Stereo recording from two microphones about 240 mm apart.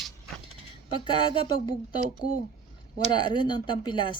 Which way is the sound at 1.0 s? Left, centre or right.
Centre.